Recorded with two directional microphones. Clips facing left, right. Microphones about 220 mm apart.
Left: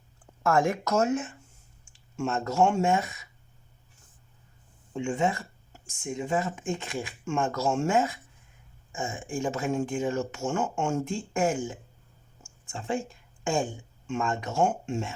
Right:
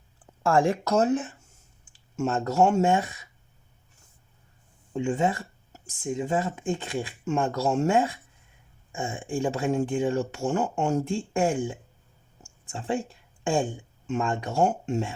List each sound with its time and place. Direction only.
0.4 s speech: 30° right (ahead or behind)
4.9 s speech: 35° right (ahead or behind)
12.4 s a sound: 35° right (ahead or behind)
14.1 s speech: 35° right (ahead or behind)